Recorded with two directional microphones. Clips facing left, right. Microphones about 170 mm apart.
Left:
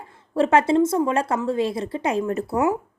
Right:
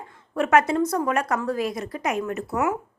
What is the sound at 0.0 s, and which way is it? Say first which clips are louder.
A woman's voice: left 4 dB; 30° left (ahead or behind).